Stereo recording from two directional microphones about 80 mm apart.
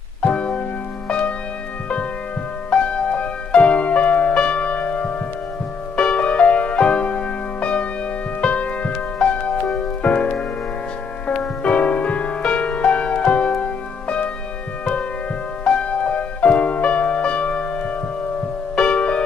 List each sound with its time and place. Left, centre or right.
0.2 s music: centre
2.7 s music: centre
15.6 s music: centre